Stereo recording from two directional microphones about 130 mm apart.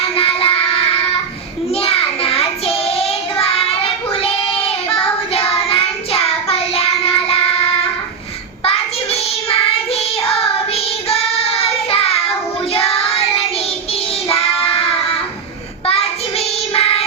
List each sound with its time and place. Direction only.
0.0 s music: 45° left (ahead or behind)
1.8 s child singing: 45° left (ahead or behind)
11.1 s child singing: 50° left (ahead or behind)
16.7 s music: 45° left (ahead or behind)